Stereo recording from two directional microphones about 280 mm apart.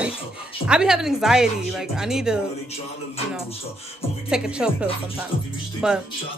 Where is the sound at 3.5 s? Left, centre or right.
Left.